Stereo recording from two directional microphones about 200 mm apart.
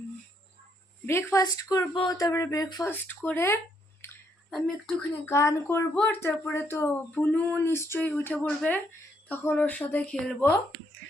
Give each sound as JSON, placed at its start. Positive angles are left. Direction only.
{"t": 1.0, "sound": "speech", "side_deg": 15}
{"t": 4.0, "sound": "a sound", "side_deg": 10}
{"t": 5.2, "sound": "speech", "side_deg": 15}